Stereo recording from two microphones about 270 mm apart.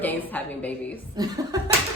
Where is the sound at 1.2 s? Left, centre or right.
Centre.